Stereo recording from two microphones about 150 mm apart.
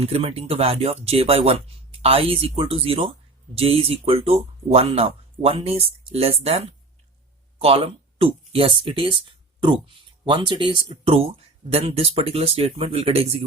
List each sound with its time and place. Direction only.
0.0 s speech: 40° right (ahead or behind)